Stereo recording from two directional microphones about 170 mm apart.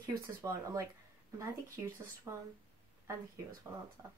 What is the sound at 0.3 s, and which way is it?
Speech, 20° right (ahead or behind).